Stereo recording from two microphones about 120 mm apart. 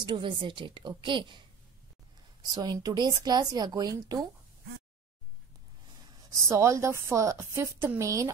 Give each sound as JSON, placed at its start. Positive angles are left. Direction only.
{"t": 0.0, "sound": "a woman's voice", "side_deg": -40}
{"t": 2.4, "sound": "a woman's voice", "side_deg": -35}
{"t": 6.3, "sound": "a woman's voice", "side_deg": -25}